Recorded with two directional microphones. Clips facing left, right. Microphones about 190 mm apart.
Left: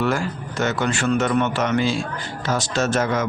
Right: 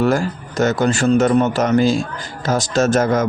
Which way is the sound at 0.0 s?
40° right (ahead or behind).